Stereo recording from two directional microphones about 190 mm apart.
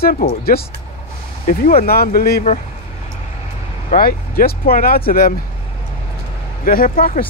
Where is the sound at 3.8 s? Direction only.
50° left (ahead or behind).